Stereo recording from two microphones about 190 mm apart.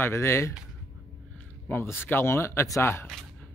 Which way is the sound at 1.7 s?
10° left (ahead or behind).